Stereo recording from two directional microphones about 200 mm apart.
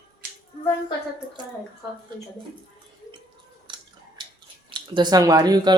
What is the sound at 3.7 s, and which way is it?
Drip, 25° right (ahead or behind).